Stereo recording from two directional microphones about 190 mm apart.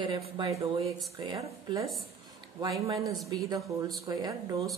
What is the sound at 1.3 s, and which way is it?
Speech, 20° right (ahead or behind).